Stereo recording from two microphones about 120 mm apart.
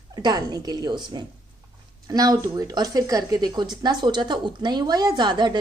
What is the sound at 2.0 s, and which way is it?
Speech, 30° right (ahead or behind).